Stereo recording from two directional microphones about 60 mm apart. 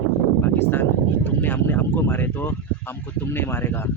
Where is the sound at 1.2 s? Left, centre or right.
Left.